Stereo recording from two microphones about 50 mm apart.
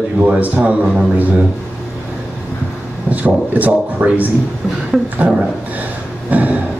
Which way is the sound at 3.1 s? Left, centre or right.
Right.